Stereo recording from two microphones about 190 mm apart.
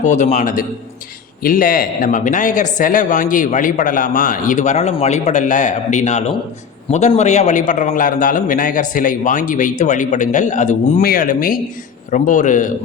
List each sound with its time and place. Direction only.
0.0 s a man's voice: 40° left (ahead or behind)